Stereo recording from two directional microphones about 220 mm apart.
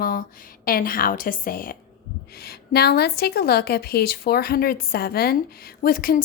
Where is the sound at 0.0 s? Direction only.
40° left (ahead or behind).